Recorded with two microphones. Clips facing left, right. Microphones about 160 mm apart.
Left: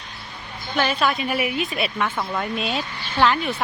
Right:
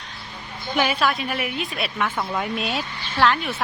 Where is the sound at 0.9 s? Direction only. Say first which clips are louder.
Left 1 dB; centre (ahead or behind).